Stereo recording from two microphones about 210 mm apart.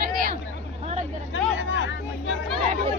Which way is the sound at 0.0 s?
40° right (ahead or behind).